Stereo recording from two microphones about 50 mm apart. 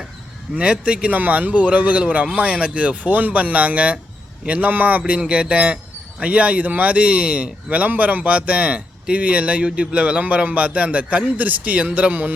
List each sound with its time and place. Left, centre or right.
0.5 s speech: right